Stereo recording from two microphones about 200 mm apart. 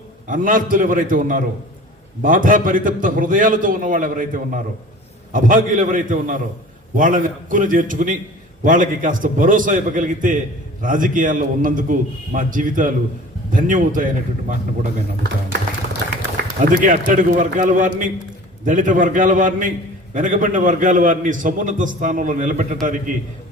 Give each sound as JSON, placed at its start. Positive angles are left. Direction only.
{"t": 0.3, "sound": "a man's voice", "side_deg": -40}
{"t": 16.6, "sound": "a man's voice", "side_deg": -40}